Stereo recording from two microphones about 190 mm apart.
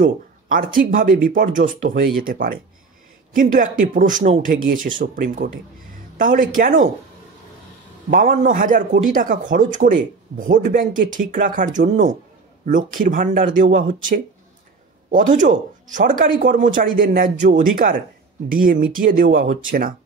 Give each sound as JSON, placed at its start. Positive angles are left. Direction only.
{"t": 0.0, "sound": "a man's voice", "side_deg": -45}
{"t": 8.1, "sound": "a man's voice", "side_deg": -45}